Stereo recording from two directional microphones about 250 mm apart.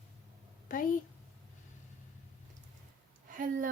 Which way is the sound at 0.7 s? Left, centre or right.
Left.